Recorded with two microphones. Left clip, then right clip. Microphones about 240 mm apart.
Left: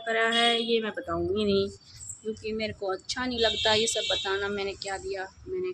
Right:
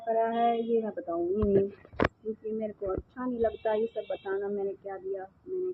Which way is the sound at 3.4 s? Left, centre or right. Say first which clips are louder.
Left 4 dB; left.